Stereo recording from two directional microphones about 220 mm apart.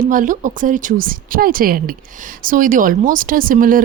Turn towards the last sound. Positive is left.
turn(degrees=-40)  # may be behind; listen again after turning